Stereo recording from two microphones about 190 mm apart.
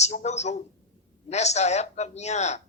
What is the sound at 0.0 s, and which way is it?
A man's voice, 35° left (ahead or behind).